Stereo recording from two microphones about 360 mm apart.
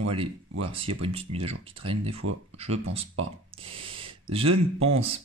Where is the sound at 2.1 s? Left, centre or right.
Right.